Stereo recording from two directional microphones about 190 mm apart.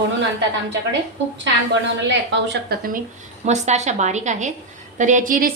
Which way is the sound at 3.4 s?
35° right (ahead or behind).